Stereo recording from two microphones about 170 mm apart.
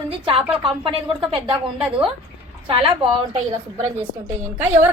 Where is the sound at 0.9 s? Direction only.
30° right (ahead or behind).